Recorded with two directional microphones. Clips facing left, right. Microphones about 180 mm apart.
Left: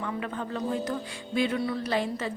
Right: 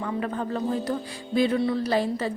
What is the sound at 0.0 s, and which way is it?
A woman's voice, 40° right (ahead or behind).